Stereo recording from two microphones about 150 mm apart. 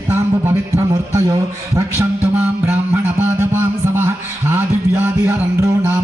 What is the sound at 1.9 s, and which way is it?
Music, 15° right (ahead or behind).